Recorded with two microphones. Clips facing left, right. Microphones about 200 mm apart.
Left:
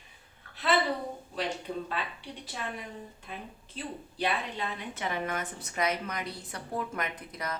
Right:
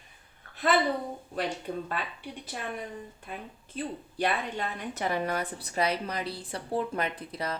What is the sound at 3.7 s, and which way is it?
A woman's voice, 50° right (ahead or behind).